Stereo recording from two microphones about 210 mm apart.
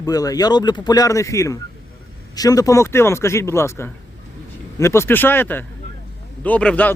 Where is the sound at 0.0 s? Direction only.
15° left (ahead or behind).